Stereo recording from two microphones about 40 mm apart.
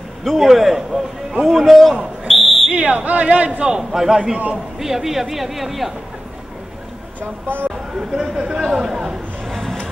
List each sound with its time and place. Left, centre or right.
0.2 s a man's voice: centre
0.5 s a man's voice: centre
2.2 s fire alarm: centre
2.9 s a man's voice: right
3.9 s speech: centre
7.4 s speech: right
8.1 s speech: centre
9.5 s vehicle: centre